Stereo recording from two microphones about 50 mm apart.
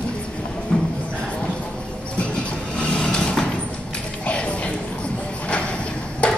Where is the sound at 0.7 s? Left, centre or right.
Centre.